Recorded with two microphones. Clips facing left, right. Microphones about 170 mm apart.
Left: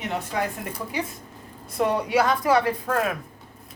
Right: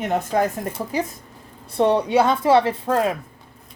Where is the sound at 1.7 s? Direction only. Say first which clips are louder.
Right 5 dB; 30° right (ahead or behind).